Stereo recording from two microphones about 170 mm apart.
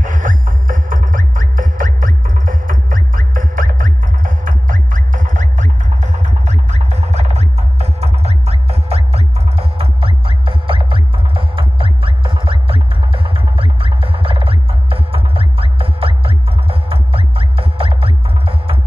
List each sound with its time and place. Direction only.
0.0 s music: 50° right (ahead or behind); by 18.8 s 35° right (ahead or behind)